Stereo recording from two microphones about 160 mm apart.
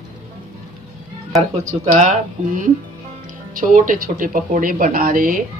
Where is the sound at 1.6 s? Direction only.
50° right (ahead or behind).